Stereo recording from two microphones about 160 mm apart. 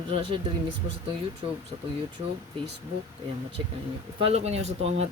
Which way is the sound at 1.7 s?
35° right (ahead or behind).